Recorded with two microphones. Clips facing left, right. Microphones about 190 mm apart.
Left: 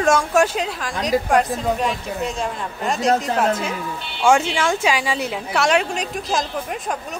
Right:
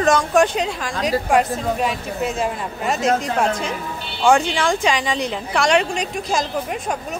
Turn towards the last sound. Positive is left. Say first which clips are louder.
# right 1 dB
turn(degrees=0)  # may be behind; listen again after turning